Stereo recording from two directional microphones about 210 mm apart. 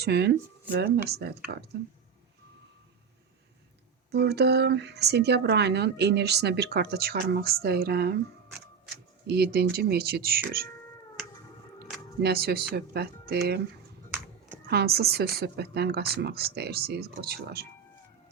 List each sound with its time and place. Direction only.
0.0 s speech: 50° right (ahead or behind)
4.1 s speech: 50° right (ahead or behind)
9.2 s speech: 50° right (ahead or behind)
12.2 s speech: 50° right (ahead or behind)
14.7 s speech: 50° right (ahead or behind)